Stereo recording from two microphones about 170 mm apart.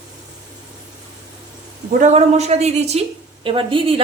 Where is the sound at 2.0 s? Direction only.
40° right (ahead or behind).